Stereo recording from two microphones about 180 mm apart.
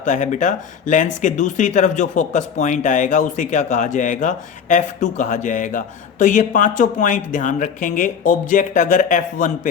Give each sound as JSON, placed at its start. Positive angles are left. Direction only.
{"t": 0.0, "sound": "speech", "side_deg": 45}